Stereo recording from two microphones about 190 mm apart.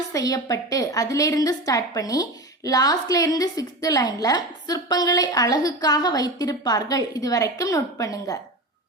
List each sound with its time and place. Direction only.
0.1 s a woman's voice: 20° left (ahead or behind)